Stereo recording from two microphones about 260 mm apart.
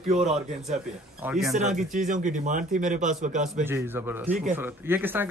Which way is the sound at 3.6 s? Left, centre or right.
Centre.